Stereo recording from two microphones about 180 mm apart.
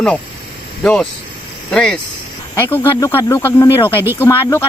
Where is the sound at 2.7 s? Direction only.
15° left (ahead or behind).